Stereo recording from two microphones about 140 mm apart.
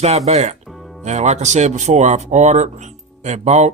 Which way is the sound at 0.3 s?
55° right (ahead or behind).